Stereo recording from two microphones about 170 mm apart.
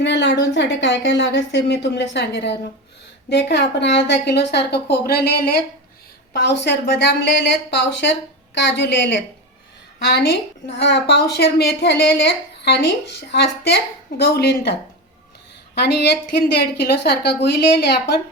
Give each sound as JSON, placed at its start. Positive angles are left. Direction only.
{"t": 0.0, "sound": "a woman's voice", "side_deg": 90}
{"t": 6.3, "sound": "speech", "side_deg": 90}
{"t": 10.1, "sound": "a woman's voice", "side_deg": 75}